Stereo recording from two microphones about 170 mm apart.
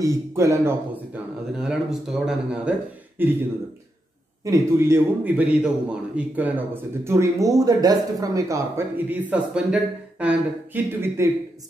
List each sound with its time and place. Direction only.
0.0 s a man's voice: 15° right (ahead or behind)
1.6 s a man's voice: 5° right (ahead or behind)
4.5 s a man's voice: 15° right (ahead or behind)